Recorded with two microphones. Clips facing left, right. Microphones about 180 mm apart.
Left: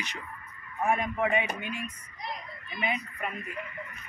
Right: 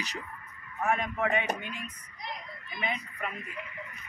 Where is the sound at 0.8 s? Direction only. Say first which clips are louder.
Left 2 dB; 15° left (ahead or behind).